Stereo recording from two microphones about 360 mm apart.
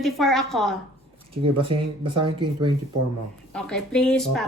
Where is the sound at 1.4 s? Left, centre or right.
Centre.